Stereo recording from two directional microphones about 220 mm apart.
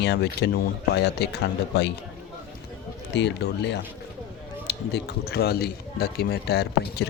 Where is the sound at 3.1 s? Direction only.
50° left (ahead or behind).